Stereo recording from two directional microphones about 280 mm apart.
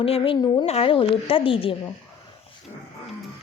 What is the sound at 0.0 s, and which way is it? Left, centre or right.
A woman's voice, centre.